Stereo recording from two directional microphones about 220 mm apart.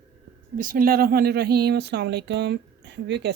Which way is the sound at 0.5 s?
40° right (ahead or behind).